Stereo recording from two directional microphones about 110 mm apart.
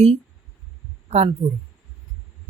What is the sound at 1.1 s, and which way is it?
Speech, 90° right.